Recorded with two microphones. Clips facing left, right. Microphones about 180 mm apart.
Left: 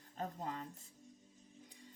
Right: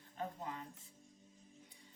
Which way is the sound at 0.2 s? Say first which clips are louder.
Left 1 dB; 40° left (ahead or behind).